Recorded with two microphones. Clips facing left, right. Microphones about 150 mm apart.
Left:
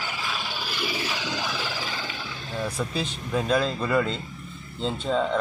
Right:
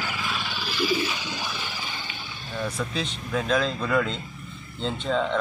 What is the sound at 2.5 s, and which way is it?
Speech, 5° left (ahead or behind).